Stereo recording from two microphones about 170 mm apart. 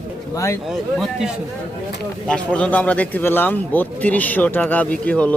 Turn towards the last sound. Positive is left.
turn(degrees=10)  # may be behind; listen again after turning